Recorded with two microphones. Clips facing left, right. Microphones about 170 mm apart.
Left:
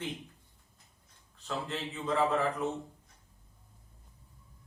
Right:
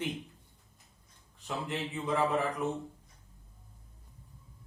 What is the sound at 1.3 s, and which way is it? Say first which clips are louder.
A man's voice: right 1 dB; 15° right (ahead or behind).